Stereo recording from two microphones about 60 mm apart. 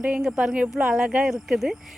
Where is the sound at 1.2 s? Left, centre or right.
Centre.